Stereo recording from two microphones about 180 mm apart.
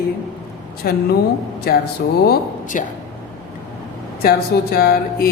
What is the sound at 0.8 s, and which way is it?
Speech, 55° left (ahead or behind).